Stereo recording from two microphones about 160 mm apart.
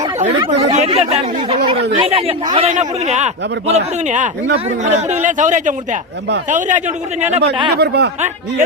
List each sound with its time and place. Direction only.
0.3 s a man's voice: 35° right (ahead or behind)
7.8 s speech: 90° right